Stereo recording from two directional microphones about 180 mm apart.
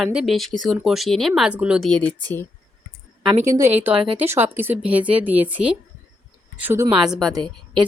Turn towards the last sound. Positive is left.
turn(degrees=-25)  # may be behind; listen again after turning